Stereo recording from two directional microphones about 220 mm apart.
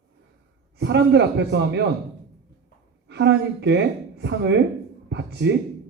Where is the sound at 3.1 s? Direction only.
50° right (ahead or behind).